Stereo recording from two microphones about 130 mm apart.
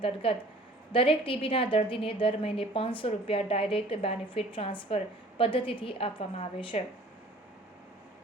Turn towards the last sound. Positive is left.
turn(degrees=45)  # may be behind; listen again after turning